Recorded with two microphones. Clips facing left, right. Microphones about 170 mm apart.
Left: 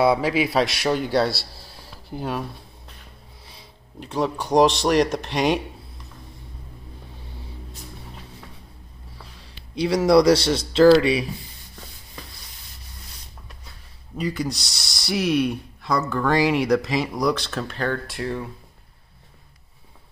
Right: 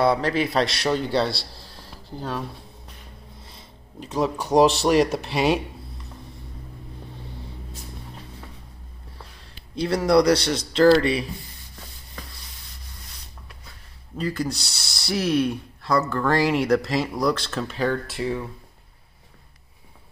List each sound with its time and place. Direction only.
0.0 s a man's voice: 5° left (ahead or behind)
4.0 s speech: 5° right (ahead or behind)
9.9 s speech: 20° left (ahead or behind)
10.8 s speech: 5° left (ahead or behind)
14.3 s speech: centre (ahead or behind)